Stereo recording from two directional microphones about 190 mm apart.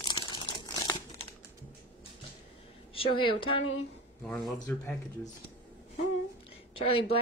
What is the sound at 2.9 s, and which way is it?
Speech, 30° left (ahead or behind).